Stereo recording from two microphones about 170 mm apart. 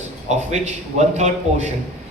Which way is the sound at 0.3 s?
40° right (ahead or behind).